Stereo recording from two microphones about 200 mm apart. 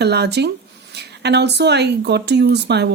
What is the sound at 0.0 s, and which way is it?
Speech, 55° right (ahead or behind).